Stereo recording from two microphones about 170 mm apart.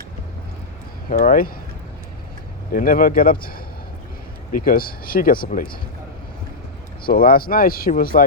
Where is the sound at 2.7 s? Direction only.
55° left (ahead or behind).